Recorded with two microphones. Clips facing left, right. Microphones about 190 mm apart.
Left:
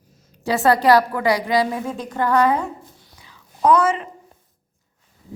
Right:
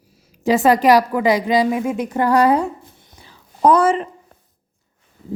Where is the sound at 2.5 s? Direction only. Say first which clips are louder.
Right 5 dB; 20° right (ahead or behind).